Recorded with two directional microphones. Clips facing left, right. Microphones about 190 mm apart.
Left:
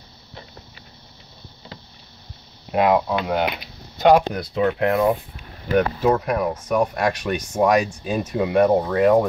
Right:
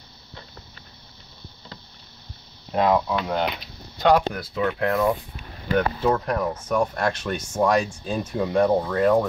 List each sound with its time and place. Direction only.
2.7 s speech: 10° left (ahead or behind)
8.6 s speech: 20° left (ahead or behind)